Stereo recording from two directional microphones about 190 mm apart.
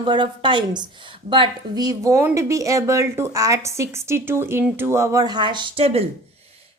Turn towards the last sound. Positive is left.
turn(degrees=-30)  # may be behind; listen again after turning